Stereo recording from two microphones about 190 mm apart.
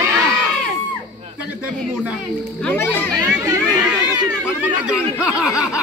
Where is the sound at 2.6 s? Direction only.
5° left (ahead or behind).